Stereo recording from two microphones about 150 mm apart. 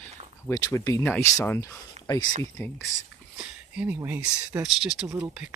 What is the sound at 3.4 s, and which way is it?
Speech, 10° right (ahead or behind).